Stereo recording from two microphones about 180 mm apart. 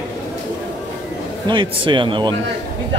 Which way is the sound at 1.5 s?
25° right (ahead or behind).